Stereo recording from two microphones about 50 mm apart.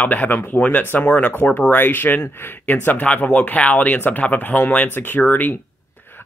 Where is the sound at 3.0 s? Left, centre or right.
Left.